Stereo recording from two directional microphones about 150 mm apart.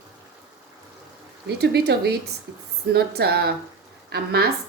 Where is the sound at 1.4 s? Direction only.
90° right.